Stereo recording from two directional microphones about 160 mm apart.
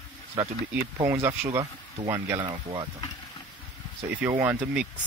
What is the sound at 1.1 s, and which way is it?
Speech, 15° right (ahead or behind).